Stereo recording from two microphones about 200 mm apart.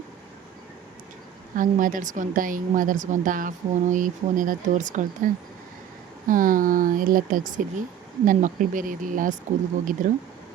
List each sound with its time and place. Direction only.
1.5 s speech: 40° right (ahead or behind)